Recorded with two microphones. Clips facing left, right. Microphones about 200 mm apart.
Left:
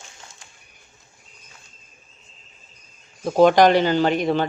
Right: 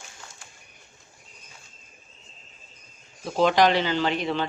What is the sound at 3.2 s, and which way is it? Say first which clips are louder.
Speech: left 6 dB; 50° left (ahead or behind).